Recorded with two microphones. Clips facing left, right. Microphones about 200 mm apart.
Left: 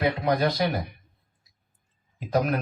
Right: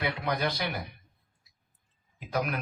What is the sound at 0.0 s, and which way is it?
Speech, 40° left (ahead or behind).